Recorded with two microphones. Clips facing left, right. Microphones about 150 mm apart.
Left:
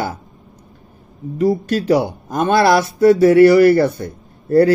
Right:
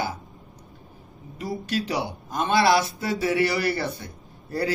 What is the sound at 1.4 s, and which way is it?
Speech, 45° left (ahead or behind).